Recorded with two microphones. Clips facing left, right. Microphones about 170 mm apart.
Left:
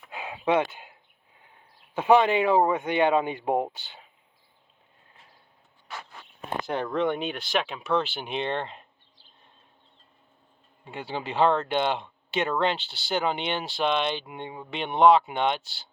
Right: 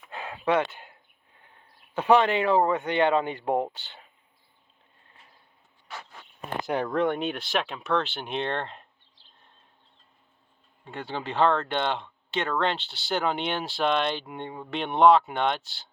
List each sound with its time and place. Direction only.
0.2 s a sound: 15° left (ahead or behind)
2.0 s speech: 15° left (ahead or behind)
6.6 s speech: 15° right (ahead or behind)
6.8 s speech: centre (ahead or behind)
10.8 s speech: 5° left (ahead or behind)